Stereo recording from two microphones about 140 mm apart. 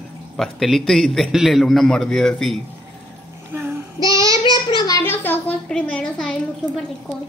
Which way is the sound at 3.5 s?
15° right (ahead or behind).